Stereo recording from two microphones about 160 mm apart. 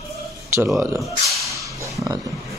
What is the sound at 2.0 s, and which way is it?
Speech, 20° right (ahead or behind).